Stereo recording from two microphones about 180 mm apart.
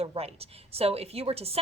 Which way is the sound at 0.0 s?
35° right (ahead or behind).